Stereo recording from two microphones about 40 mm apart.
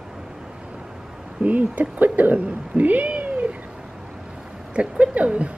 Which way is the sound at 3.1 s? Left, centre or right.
Right.